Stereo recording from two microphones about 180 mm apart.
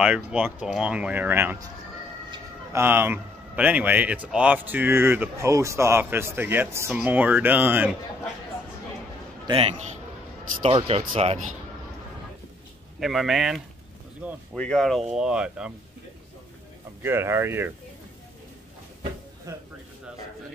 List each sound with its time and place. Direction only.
0.0 s a man's voice: 5° right (ahead or behind)
10.6 s speech: 30° right (ahead or behind)
13.0 s speech: centre (ahead or behind)
17.0 s a man's voice: 15° right (ahead or behind)